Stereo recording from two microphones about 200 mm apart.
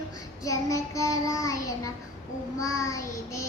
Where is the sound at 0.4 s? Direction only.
15° left (ahead or behind).